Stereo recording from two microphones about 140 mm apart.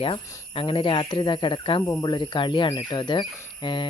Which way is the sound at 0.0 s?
40° left (ahead or behind).